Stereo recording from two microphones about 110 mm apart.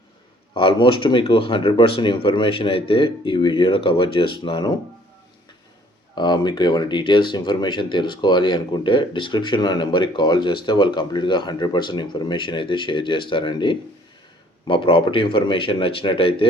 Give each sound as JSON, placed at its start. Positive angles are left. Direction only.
{"t": 0.5, "sound": "speech", "side_deg": 50}
{"t": 6.1, "sound": "speech", "side_deg": 40}